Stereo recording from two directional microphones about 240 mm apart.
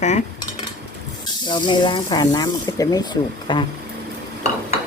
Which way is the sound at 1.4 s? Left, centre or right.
Centre.